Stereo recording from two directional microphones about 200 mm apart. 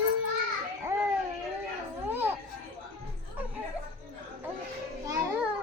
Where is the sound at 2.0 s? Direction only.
10° right (ahead or behind).